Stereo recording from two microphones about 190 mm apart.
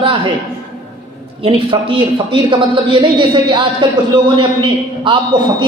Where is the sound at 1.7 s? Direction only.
25° right (ahead or behind).